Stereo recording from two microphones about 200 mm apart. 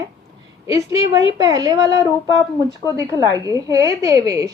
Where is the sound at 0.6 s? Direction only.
15° right (ahead or behind).